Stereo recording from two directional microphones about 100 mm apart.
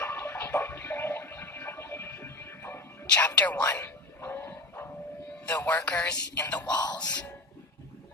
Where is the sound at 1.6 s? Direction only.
25° left (ahead or behind).